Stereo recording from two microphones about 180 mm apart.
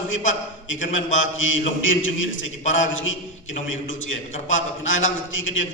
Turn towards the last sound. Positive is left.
turn(degrees=90)